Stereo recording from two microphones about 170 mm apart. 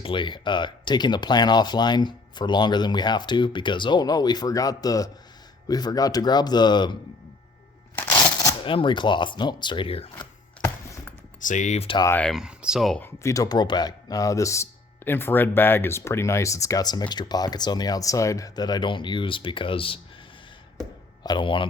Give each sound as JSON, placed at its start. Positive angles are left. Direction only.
{"t": 0.0, "sound": "speech", "side_deg": 30}
{"t": 7.9, "sound": "a sound", "side_deg": 15}
{"t": 8.6, "sound": "speech", "side_deg": 30}
{"t": 10.6, "sound": "music", "side_deg": 20}
{"t": 11.3, "sound": "speech", "side_deg": 50}
{"t": 11.9, "sound": "speech", "side_deg": 15}
{"t": 12.2, "sound": "speech", "side_deg": 0}
{"t": 13.0, "sound": "speech", "side_deg": 15}
{"t": 21.2, "sound": "speech", "side_deg": 30}